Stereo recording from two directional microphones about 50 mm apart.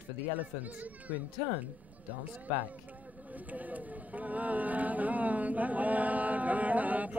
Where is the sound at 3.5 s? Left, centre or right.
Right.